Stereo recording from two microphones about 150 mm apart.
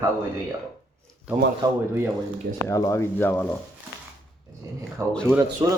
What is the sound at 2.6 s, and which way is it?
Speech, 20° left (ahead or behind).